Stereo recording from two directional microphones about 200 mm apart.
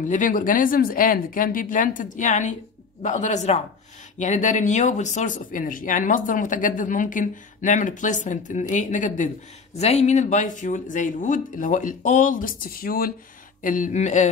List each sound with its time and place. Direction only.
0.0 s speech: 40° left (ahead or behind)